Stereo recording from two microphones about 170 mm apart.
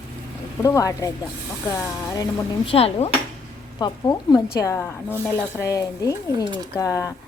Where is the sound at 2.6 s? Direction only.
35° left (ahead or behind).